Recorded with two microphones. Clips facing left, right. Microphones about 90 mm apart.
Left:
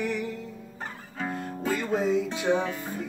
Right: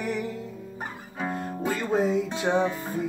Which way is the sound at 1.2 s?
10° right (ahead or behind).